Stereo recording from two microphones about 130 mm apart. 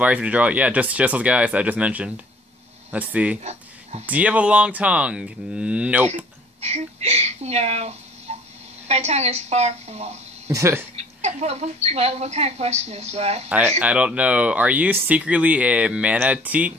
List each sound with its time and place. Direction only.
0.0 s speech: 10° right (ahead or behind)
6.0 s speech: 55° right (ahead or behind)
10.5 s speech: 20° right (ahead or behind)
11.0 s speech: 55° right (ahead or behind)
13.5 s speech: 15° right (ahead or behind)